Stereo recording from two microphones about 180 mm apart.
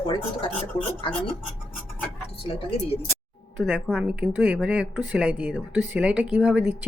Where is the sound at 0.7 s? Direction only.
30° left (ahead or behind).